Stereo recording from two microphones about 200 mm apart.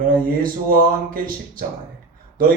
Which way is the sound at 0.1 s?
45° right (ahead or behind).